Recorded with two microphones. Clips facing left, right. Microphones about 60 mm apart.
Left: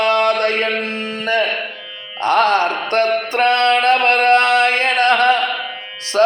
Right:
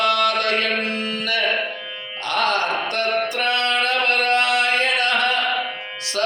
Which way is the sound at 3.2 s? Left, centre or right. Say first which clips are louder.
Left 7 dB; left.